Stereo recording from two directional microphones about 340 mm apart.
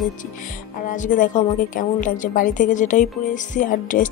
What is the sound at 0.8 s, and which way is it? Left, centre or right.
A woman's voice, left.